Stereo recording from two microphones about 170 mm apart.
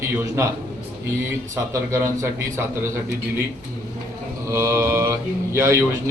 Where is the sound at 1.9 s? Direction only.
15° right (ahead or behind).